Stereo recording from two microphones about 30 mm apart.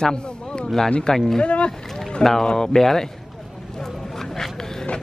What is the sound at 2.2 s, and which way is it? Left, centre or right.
Speech, centre.